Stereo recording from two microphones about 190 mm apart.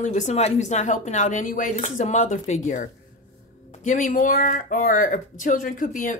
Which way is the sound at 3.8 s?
40° left (ahead or behind).